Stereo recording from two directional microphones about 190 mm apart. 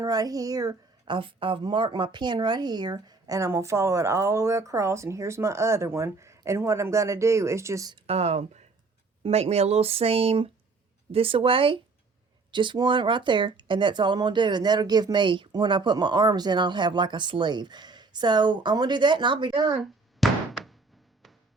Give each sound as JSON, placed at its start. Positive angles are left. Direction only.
{"t": 0.0, "sound": "a woman's voice", "side_deg": -20}
{"t": 8.0, "sound": "speech", "side_deg": -35}
{"t": 20.1, "sound": "a sound", "side_deg": 0}